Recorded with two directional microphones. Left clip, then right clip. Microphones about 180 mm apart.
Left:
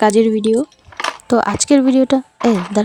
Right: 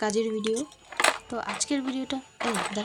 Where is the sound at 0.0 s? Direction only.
55° left (ahead or behind).